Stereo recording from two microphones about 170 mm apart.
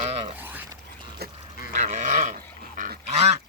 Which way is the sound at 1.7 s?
50° right (ahead or behind).